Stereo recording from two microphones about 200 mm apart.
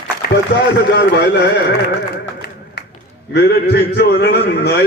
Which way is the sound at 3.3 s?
55° left (ahead or behind).